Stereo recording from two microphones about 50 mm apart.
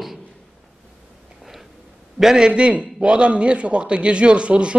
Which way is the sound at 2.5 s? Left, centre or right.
Right.